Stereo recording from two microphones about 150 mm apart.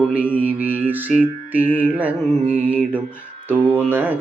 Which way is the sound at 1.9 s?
10° right (ahead or behind).